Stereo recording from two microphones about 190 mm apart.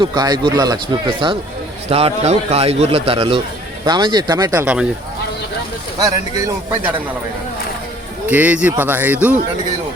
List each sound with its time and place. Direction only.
0.0 s a man's voice: 20° right (ahead or behind)
4.6 s speech: 5° right (ahead or behind)
6.0 s speech: 20° right (ahead or behind)
8.3 s speech: 10° right (ahead or behind)